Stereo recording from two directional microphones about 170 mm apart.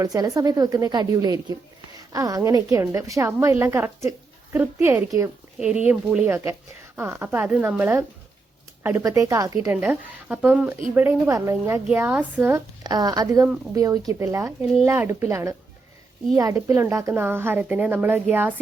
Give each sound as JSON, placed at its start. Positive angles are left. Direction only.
{"t": 0.0, "sound": "a woman's voice", "side_deg": -20}
{"t": 9.6, "sound": "a woman's voice", "side_deg": -10}
{"t": 11.9, "sound": "a woman's voice", "side_deg": -5}